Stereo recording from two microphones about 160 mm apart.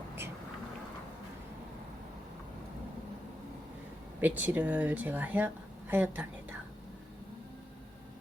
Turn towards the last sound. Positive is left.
turn(degrees=-10)  # may be behind; listen again after turning